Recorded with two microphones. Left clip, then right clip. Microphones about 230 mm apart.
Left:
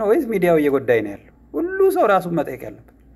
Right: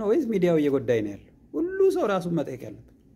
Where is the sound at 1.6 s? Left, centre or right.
Right.